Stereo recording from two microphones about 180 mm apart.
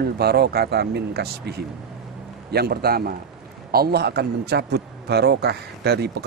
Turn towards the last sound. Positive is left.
turn(degrees=-65)  # may be behind; listen again after turning